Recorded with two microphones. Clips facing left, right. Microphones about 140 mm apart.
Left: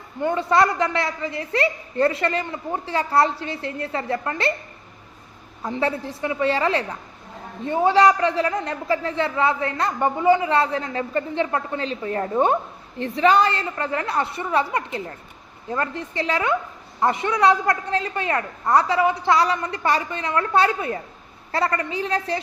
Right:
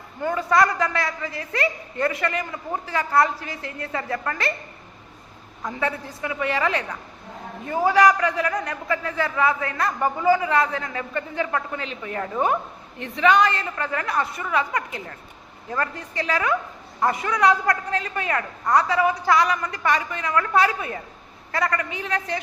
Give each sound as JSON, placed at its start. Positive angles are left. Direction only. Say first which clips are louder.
{"t": 0.2, "sound": "a man's voice", "louder": "left 1 dB", "side_deg": 25}
{"t": 5.6, "sound": "a man's voice", "louder": "left 3 dB", "side_deg": 30}